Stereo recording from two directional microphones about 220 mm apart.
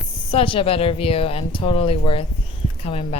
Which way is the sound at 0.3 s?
25° left (ahead or behind).